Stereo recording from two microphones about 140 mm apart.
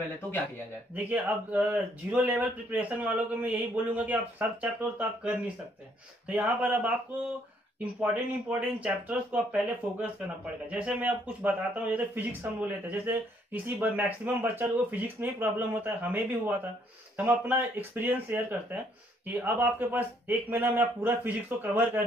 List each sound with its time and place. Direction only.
0.9 s speech: 10° right (ahead or behind)